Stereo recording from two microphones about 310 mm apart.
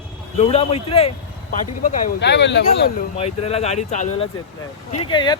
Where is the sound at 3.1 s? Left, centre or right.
Centre.